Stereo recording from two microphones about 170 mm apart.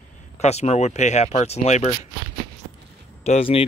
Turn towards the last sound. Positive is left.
turn(degrees=35)  # may be behind; listen again after turning